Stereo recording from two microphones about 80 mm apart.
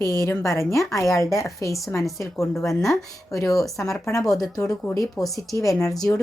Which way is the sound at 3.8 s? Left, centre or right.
Left.